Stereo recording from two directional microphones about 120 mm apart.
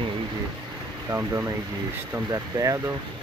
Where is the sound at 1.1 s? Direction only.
20° right (ahead or behind).